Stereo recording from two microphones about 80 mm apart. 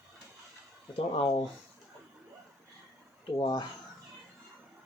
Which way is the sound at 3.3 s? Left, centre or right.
Left.